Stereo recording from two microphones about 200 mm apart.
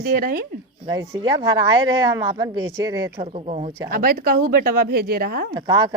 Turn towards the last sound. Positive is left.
turn(degrees=-20)  # may be behind; listen again after turning